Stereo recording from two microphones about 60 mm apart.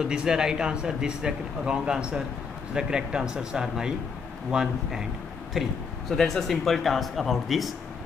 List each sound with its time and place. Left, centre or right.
0.0 s a man's voice: centre
5.5 s speech: centre